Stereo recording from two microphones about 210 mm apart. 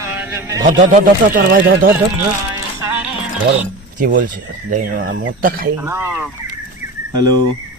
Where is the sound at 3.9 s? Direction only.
40° right (ahead or behind).